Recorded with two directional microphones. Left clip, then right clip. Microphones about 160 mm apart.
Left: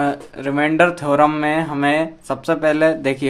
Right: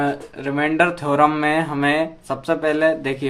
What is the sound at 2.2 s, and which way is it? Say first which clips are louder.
Speech: left 3 dB; 30° left (ahead or behind).